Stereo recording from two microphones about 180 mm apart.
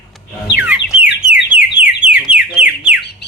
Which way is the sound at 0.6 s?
5° right (ahead or behind).